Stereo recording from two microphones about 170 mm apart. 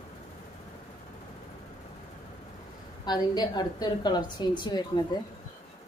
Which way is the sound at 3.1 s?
25° left (ahead or behind).